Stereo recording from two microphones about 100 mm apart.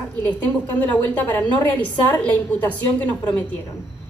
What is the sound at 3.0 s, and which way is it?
Speech, 15° left (ahead or behind).